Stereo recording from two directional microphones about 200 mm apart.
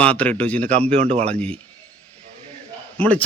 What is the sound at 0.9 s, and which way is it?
Speech, 30° right (ahead or behind).